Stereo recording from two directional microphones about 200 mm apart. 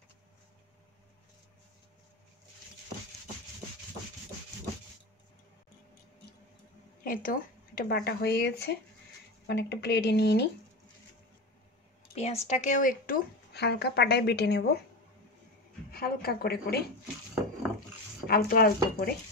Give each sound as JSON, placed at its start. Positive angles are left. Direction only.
{"t": 7.1, "sound": "a woman's voice", "side_deg": 45}
{"t": 12.1, "sound": "a woman's voice", "side_deg": 30}
{"t": 15.9, "sound": "a woman's voice", "side_deg": 50}
{"t": 18.2, "sound": "a woman's voice", "side_deg": 50}